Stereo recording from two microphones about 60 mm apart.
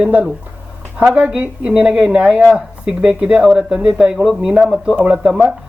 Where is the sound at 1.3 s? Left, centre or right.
Centre.